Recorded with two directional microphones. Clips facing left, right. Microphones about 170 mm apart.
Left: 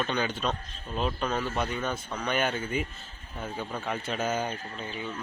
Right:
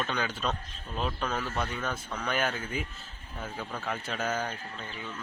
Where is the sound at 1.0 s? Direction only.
5° left (ahead or behind).